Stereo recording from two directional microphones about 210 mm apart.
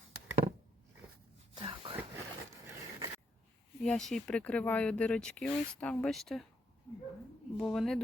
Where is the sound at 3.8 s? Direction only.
5° left (ahead or behind).